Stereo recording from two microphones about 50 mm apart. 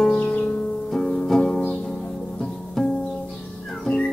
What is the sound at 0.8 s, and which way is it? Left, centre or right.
Music, centre.